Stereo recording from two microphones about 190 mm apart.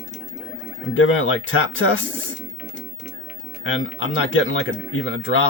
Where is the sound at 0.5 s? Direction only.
90° left.